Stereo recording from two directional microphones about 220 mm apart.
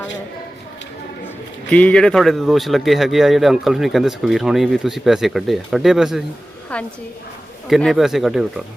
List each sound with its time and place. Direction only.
1.7 s speech: 5° left (ahead or behind)